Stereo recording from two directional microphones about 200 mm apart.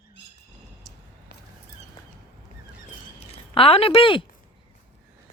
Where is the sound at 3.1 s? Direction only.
30° left (ahead or behind).